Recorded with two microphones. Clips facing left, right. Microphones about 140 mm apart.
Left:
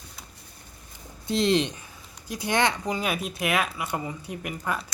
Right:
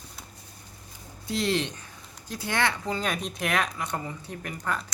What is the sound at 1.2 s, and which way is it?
Speech, 20° left (ahead or behind).